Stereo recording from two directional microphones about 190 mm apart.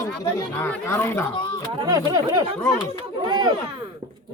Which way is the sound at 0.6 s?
10° left (ahead or behind).